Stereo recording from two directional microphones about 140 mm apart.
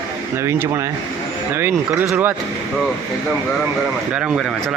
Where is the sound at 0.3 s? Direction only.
20° right (ahead or behind).